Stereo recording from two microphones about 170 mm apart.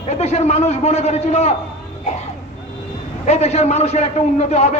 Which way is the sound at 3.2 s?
40° left (ahead or behind).